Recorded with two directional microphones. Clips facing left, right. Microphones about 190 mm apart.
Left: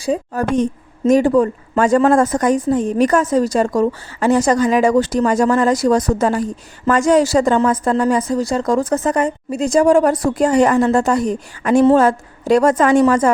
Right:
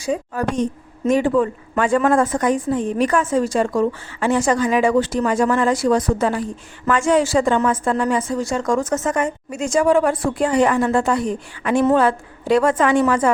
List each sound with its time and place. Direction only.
0.0 s a woman's voice: 35° left (ahead or behind)